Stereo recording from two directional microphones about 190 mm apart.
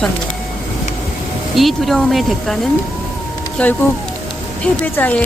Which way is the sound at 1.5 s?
Centre (ahead or behind).